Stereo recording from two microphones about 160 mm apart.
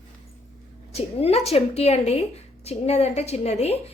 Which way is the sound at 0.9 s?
40° left (ahead or behind).